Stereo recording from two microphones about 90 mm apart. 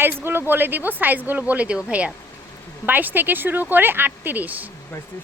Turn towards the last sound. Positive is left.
turn(degrees=-20)  # may be behind; listen again after turning